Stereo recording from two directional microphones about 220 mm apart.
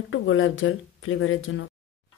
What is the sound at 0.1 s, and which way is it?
A woman's voice, 60° left (ahead or behind).